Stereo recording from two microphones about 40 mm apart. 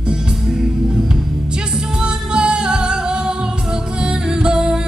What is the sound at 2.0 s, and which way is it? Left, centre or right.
Music, right.